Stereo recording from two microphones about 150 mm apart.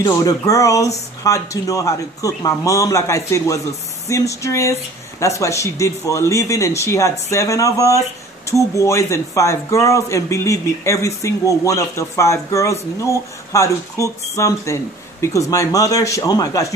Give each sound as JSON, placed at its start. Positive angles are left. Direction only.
{"t": 0.0, "sound": "speech", "side_deg": 25}